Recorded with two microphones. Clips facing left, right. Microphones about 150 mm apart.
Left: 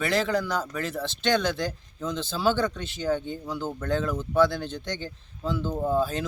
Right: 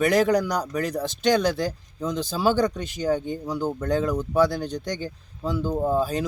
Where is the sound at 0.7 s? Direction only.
40° right (ahead or behind).